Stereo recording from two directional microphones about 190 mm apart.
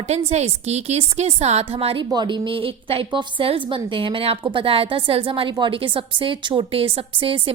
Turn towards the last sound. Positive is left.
turn(degrees=-30)  # may be behind; listen again after turning